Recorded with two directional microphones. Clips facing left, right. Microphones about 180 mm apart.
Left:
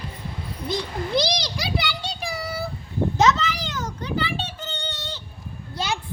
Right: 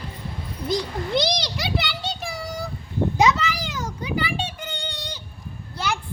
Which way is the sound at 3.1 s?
10° right (ahead or behind).